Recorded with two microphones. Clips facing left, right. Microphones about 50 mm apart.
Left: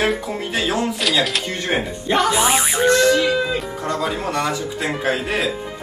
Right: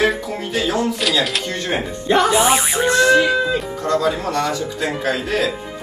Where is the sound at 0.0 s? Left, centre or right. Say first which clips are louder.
Right 2 dB; left.